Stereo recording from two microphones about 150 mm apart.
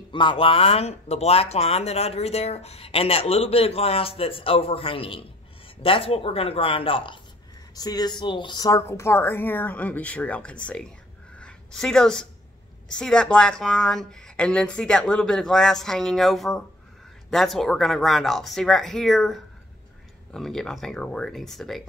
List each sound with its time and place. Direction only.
0.1 s speech: 35° left (ahead or behind); by 10.9 s 5° left (ahead or behind)
11.3 s a sound: 5° left (ahead or behind)
12.8 s speech: 5° left (ahead or behind)